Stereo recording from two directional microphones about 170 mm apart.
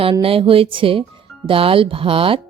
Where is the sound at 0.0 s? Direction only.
35° right (ahead or behind).